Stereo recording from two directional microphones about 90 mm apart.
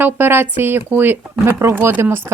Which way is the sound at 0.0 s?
25° right (ahead or behind).